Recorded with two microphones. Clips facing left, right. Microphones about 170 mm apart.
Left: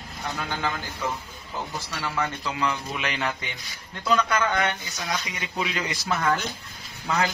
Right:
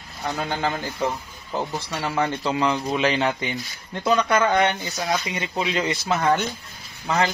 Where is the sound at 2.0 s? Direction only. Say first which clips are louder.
Right 5 dB; 30° right (ahead or behind).